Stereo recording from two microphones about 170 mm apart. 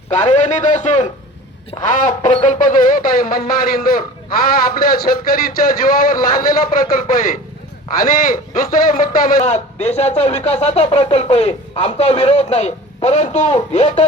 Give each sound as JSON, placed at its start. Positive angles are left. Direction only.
{"t": 0.1, "sound": "a man's voice", "side_deg": 45}
{"t": 1.8, "sound": "music", "side_deg": 50}
{"t": 8.0, "sound": "a man's voice", "side_deg": 55}